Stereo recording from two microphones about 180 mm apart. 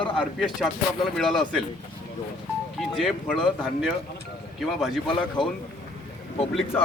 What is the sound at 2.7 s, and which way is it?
Speech, centre (ahead or behind).